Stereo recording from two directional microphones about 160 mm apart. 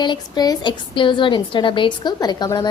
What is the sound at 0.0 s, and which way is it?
A woman's voice, 25° left (ahead or behind).